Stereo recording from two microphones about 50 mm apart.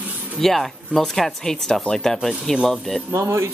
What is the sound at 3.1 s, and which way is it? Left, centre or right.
Speech, right.